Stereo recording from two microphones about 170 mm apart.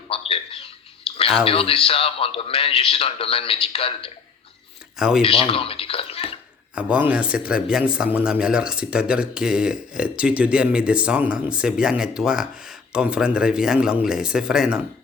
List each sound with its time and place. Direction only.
0.1 s a sound: 35° left (ahead or behind)
1.5 s a man's voice: 35° left (ahead or behind)
4.9 s speech: 5° right (ahead or behind)
5.2 s a man's voice: 35° left (ahead or behind)
6.7 s speech: 10° right (ahead or behind)